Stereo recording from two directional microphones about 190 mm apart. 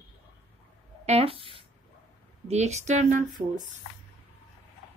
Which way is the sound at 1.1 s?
30° right (ahead or behind).